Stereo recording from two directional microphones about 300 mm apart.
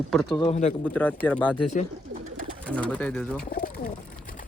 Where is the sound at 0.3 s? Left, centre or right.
Centre.